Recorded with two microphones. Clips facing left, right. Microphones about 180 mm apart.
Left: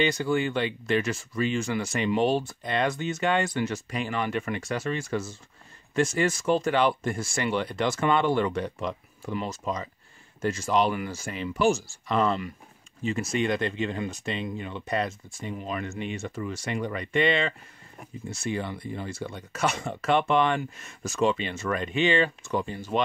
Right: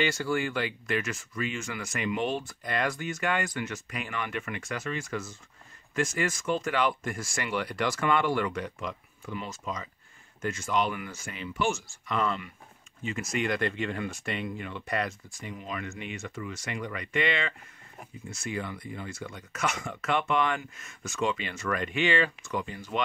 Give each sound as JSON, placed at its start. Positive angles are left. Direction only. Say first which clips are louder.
{"t": 0.0, "sound": "speech", "louder": "left 3 dB", "side_deg": 20}
{"t": 15.5, "sound": "speech", "louder": "left 5 dB", "side_deg": 35}